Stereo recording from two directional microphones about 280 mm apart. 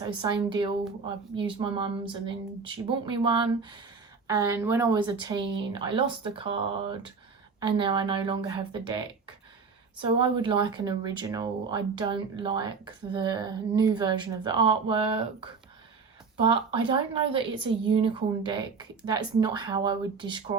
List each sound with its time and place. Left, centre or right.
0.2 s speech: centre
7.6 s speech: centre